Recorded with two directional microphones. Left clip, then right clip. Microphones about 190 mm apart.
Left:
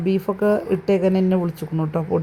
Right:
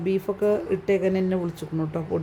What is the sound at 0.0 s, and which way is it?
Speech, 20° left (ahead or behind).